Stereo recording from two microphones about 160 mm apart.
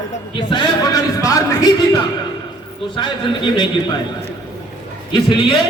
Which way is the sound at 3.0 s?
30° left (ahead or behind).